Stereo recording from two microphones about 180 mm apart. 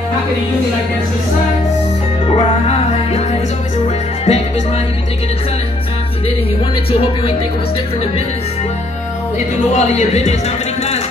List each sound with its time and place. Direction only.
2.3 s music: 35° left (ahead or behind)
6.9 s speech: 30° left (ahead or behind)
9.8 s speech: 40° left (ahead or behind)